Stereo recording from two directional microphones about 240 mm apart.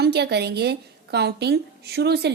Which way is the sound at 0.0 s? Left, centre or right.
Right.